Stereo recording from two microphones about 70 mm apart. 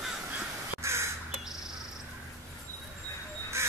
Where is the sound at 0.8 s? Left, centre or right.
Right.